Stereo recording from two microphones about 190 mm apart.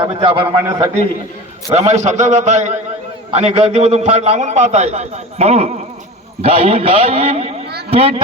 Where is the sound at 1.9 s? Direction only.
35° right (ahead or behind).